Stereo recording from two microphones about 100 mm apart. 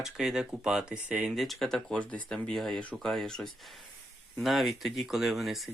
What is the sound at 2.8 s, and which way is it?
Speech, 15° left (ahead or behind).